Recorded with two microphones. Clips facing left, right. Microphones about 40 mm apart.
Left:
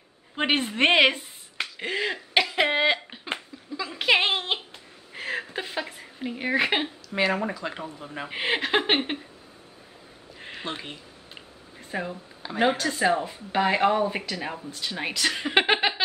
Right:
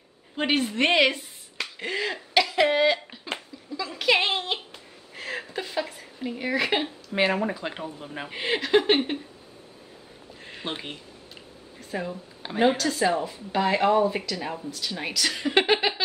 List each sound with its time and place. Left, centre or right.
0.4 s a woman's voice: centre
1.6 s finger snapping: centre
2.5 s a sound: left
7.1 s speech: centre
8.3 s a woman's voice: left
10.6 s speech: centre
11.9 s speech: centre
12.4 s a woman's voice: right
12.8 s a woman's voice: centre